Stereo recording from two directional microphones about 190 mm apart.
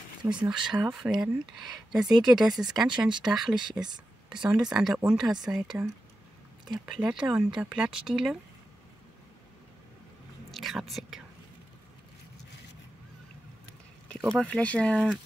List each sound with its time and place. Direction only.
0.2 s speech: 25° right (ahead or behind)
0.5 s speech: 5° right (ahead or behind)
10.5 s chewing: centre (ahead or behind)
14.0 s speech: 5° left (ahead or behind)